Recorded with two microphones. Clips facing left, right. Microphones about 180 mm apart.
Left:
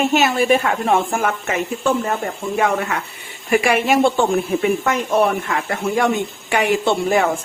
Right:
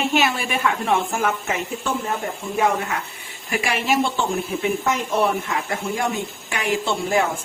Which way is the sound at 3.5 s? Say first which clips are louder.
Left 6 dB; 55° left (ahead or behind).